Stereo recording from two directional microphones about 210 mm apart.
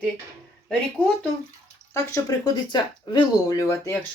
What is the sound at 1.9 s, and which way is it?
Speech, 15° left (ahead or behind).